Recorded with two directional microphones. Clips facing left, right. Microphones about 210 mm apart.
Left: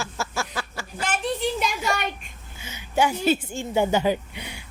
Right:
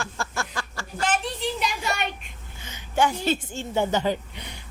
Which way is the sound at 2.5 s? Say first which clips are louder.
Left 1 dB; 10° left (ahead or behind).